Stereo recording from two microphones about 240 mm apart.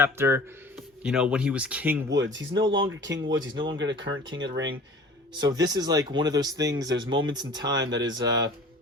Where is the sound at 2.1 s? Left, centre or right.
Right.